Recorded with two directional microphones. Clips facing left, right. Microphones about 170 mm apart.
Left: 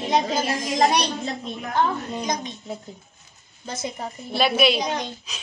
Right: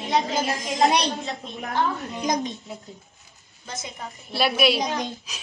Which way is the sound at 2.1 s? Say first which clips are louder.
Right 1 dB; 20° left (ahead or behind).